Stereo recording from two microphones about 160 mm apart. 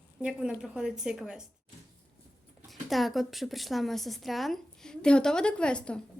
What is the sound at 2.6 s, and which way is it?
Speech, centre (ahead or behind).